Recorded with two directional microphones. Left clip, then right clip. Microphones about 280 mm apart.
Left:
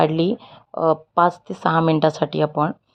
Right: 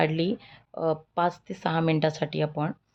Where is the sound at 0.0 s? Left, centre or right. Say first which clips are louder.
Left 7 dB; centre.